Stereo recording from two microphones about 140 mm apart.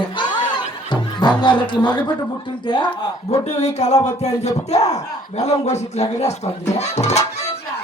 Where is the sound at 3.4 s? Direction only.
55° left (ahead or behind).